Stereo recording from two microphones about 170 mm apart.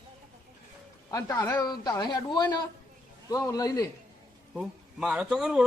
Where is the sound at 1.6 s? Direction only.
25° left (ahead or behind).